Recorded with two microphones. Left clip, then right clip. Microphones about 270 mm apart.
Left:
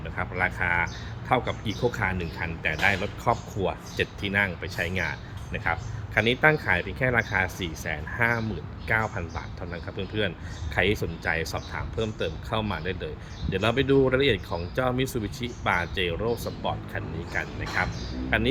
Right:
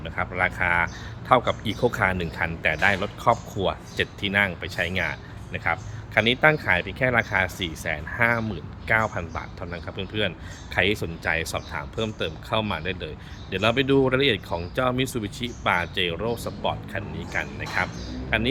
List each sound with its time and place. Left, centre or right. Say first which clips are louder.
0.0 s speech: right 3 dB; centre